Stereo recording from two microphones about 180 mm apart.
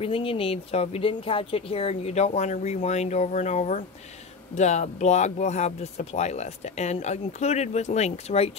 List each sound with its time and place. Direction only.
0.0 s speech: 30° left (ahead or behind)